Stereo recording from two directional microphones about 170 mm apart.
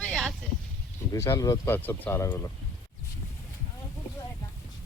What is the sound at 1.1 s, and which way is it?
Speech, 20° left (ahead or behind).